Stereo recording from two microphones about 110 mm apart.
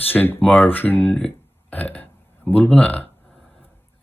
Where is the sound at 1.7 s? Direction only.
15° left (ahead or behind).